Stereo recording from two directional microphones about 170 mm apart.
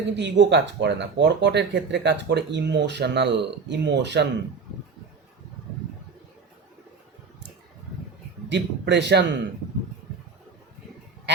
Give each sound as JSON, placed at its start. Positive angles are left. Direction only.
{"t": 0.1, "sound": "speech", "side_deg": -90}
{"t": 8.4, "sound": "speech", "side_deg": -90}